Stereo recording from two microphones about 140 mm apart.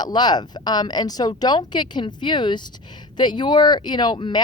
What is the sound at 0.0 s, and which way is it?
A woman's voice, 30° left (ahead or behind).